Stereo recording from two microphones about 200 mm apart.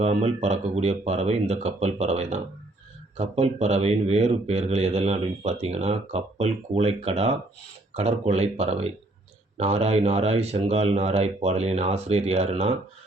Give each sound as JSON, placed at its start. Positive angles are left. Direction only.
{"t": 0.0, "sound": "speech", "side_deg": -35}